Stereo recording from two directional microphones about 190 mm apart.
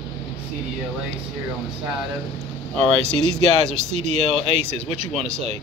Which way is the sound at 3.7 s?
35° right (ahead or behind).